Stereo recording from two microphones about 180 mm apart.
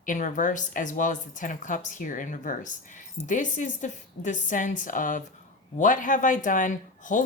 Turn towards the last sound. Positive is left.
turn(degrees=45)  # may be behind; listen again after turning